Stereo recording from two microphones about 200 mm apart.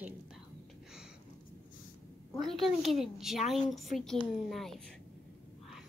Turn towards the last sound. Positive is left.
turn(degrees=0)  # may be behind; listen again after turning